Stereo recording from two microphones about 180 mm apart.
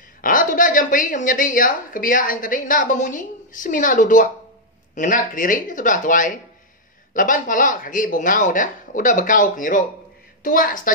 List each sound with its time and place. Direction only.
0.2 s a woman's voice: 50° left (ahead or behind)